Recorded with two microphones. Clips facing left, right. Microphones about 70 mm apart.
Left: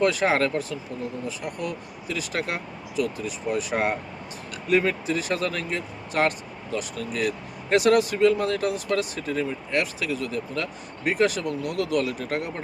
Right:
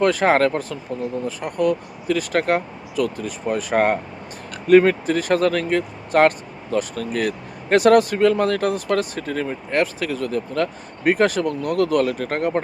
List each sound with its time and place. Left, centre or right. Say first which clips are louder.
0.0 s speech: right 5 dB; right